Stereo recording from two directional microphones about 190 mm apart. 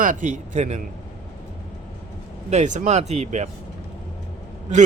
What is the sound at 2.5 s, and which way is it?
Speech, 40° right (ahead or behind).